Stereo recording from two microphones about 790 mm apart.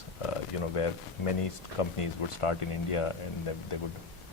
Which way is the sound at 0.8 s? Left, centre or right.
Left.